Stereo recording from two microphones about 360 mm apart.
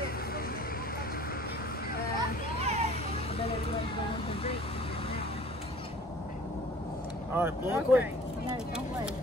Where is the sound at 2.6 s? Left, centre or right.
Centre.